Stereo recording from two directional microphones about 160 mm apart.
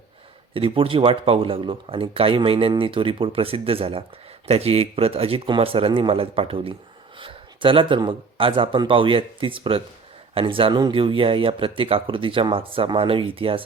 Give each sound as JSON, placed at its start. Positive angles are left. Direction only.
{"t": 0.5, "sound": "speech", "side_deg": -35}